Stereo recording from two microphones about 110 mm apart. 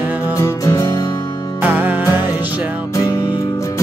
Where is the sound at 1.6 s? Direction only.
15° right (ahead or behind).